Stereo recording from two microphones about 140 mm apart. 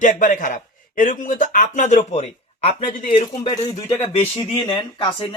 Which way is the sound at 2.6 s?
45° left (ahead or behind).